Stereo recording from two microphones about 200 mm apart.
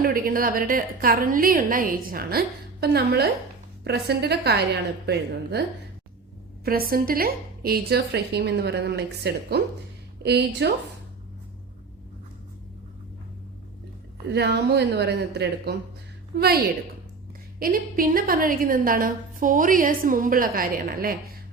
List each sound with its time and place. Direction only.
0.0 s a woman's voice: 45° right (ahead or behind)
6.7 s a woman's voice: 45° right (ahead or behind)
14.3 s a woman's voice: 55° right (ahead or behind)